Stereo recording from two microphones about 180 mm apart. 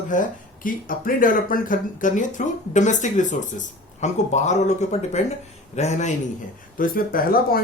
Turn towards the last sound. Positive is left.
turn(degrees=55)  # may be behind; listen again after turning